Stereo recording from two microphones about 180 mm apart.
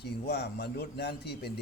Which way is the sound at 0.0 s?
65° left (ahead or behind).